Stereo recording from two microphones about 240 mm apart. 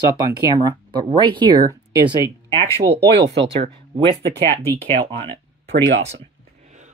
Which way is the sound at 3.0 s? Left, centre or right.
Right.